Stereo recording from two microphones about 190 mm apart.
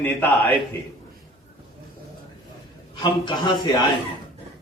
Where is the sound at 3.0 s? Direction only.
25° left (ahead or behind).